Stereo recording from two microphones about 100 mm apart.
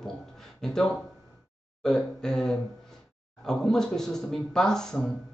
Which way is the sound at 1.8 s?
5° left (ahead or behind).